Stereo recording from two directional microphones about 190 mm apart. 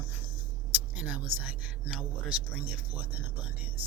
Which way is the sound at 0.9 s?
5° right (ahead or behind).